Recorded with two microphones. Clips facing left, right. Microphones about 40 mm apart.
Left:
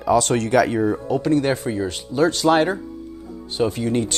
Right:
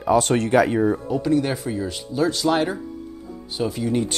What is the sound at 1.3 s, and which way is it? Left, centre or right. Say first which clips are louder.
Speech: left 2 dB; left.